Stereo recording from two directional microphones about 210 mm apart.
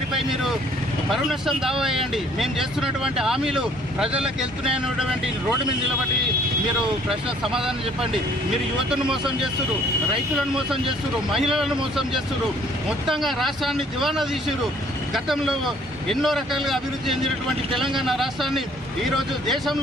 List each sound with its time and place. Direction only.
0.1 s speech: centre (ahead or behind)
7.1 s speech: centre (ahead or behind)
8.9 s speech: 5° right (ahead or behind)
11.5 s speech: centre (ahead or behind)